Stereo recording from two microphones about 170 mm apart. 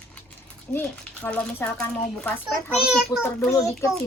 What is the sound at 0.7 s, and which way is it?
Speech, 10° left (ahead or behind).